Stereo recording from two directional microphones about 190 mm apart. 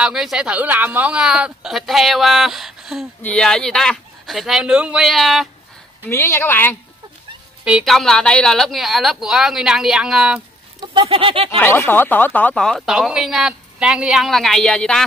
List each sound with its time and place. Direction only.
0.0 s speech: 5° right (ahead or behind)
6.0 s speech: 15° left (ahead or behind)
7.6 s speech: centre (ahead or behind)
10.9 s a sound: 30° right (ahead or behind)
11.5 s speech: 10° left (ahead or behind)